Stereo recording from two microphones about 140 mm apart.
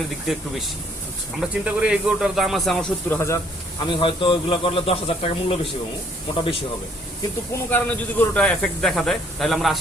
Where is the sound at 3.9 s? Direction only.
40° left (ahead or behind).